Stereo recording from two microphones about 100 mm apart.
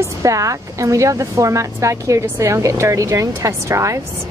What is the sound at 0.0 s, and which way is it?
Speech, 30° right (ahead or behind).